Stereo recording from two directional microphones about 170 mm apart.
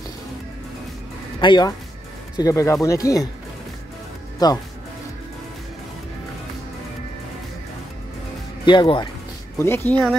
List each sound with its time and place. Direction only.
1.4 s speech: 25° left (ahead or behind)
4.4 s speech: 25° left (ahead or behind)
8.6 s speech: 30° left (ahead or behind)
9.6 s speech: 15° left (ahead or behind)